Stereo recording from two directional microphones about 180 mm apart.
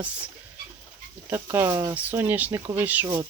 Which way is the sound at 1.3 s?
15° right (ahead or behind).